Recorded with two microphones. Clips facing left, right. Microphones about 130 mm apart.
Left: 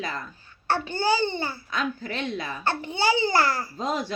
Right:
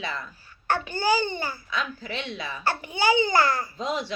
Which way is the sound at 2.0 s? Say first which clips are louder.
Left 3 dB; 45° left (ahead or behind).